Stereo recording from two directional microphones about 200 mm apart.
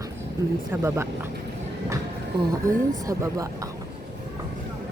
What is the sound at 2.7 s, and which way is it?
Speech, 15° right (ahead or behind).